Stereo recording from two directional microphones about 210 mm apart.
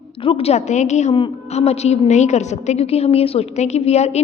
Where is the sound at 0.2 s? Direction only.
25° left (ahead or behind).